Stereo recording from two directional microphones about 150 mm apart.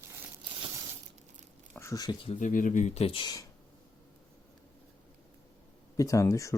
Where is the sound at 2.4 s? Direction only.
60° left (ahead or behind); by 3.3 s 35° left (ahead or behind).